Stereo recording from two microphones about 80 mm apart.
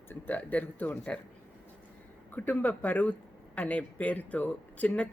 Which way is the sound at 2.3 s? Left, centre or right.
Left.